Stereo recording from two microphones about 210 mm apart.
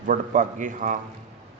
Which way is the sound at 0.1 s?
35° right (ahead or behind).